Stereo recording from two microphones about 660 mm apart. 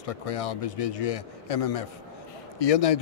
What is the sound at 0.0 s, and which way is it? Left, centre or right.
Speech, left.